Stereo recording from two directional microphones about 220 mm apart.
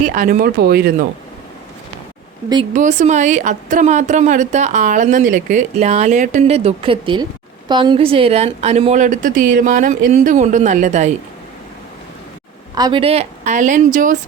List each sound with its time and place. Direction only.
0.0 s speech: 35° right (ahead or behind)
2.7 s a woman's voice: 35° right (ahead or behind)
12.7 s a woman's voice: 20° right (ahead or behind); by 14.2 s 35° right (ahead or behind)